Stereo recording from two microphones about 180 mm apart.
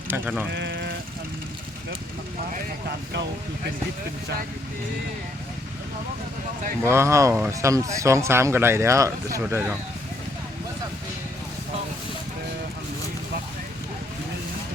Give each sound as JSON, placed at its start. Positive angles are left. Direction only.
{"t": 0.1, "sound": "speech", "side_deg": -10}
{"t": 0.5, "sound": "sheep", "side_deg": -70}
{"t": 6.8, "sound": "speech", "side_deg": -15}